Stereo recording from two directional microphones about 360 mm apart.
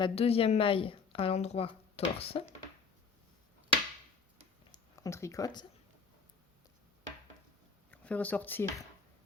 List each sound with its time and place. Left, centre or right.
0.0 s a woman's voice: centre
4.9 s a woman's voice: centre
7.9 s speech: centre